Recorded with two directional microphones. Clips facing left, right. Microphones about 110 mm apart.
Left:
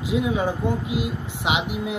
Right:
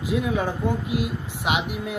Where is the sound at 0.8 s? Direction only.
90° left.